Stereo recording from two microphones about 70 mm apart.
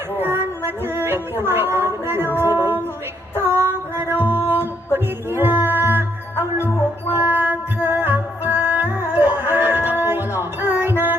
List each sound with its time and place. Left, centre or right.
0.2 s music: right
1.5 s a sound: right
2.2 s music: left
2.6 s music: right
3.6 s female singing: right
4.4 s music: left
5.3 s music: right
6.6 s music: left
7.2 s music: right